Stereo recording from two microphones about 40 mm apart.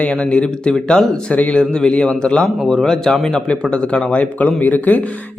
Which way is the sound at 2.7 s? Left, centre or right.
Centre.